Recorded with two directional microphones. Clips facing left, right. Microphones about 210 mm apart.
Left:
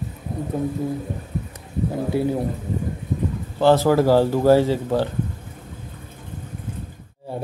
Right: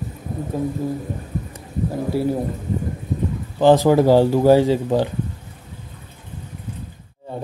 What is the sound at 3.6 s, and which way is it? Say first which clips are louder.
A man's voice: right 2 dB; 15° right (ahead or behind).